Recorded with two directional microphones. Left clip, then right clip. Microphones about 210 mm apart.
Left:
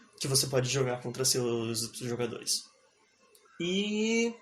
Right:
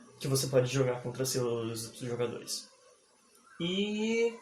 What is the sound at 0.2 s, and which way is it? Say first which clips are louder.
Speech: right 1 dB; 45° left (ahead or behind).